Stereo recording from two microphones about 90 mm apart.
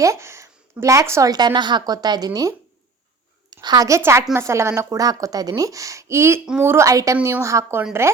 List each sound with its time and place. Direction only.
0.0 s speech: 35° right (ahead or behind)
1.3 s a woman's voice: 50° right (ahead or behind); by 6.8 s 25° right (ahead or behind)
6.8 s speech: 40° right (ahead or behind)